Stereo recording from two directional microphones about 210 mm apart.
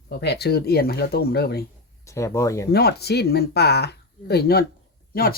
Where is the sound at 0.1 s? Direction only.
50° left (ahead or behind).